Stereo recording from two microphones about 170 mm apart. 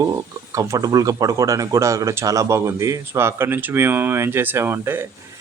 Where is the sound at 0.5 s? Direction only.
20° right (ahead or behind).